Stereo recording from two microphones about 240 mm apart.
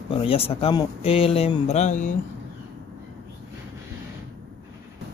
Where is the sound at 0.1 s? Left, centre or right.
Left.